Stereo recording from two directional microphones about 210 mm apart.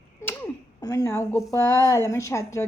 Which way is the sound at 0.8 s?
15° left (ahead or behind).